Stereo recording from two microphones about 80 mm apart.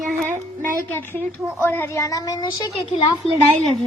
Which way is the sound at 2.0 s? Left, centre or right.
Left.